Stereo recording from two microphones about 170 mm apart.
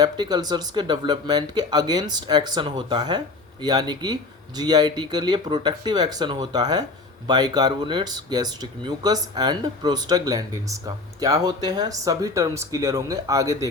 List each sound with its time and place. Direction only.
0.0 s speech: 25° right (ahead or behind)